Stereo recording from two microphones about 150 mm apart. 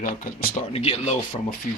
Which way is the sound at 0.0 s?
65° left (ahead or behind).